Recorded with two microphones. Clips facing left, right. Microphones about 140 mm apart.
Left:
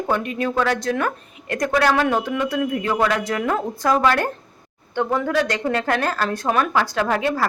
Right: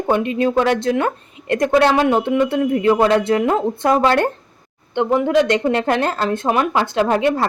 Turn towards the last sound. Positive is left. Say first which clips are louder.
# right 4 dB
turn(degrees=-25)  # may be behind; listen again after turning